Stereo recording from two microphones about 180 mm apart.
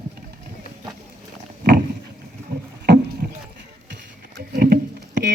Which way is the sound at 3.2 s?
60° right (ahead or behind).